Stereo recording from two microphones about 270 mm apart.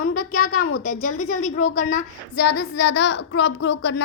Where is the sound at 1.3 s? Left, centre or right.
Left.